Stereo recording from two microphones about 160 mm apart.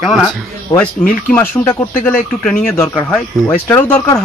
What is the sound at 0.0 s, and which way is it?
Speech, centre (ahead or behind).